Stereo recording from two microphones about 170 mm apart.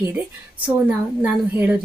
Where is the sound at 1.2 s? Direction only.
10° right (ahead or behind).